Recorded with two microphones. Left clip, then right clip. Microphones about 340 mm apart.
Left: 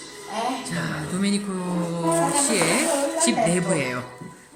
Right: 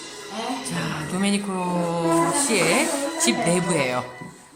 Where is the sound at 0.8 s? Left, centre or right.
Centre.